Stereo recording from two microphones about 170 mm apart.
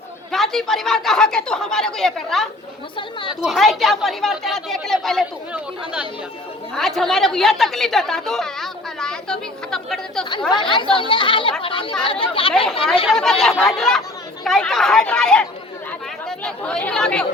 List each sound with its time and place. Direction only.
0.3 s a woman's voice: centre (ahead or behind)
6.7 s a woman's voice: centre (ahead or behind)
10.5 s speech: 30° left (ahead or behind)
13.1 s a woman's voice: centre (ahead or behind)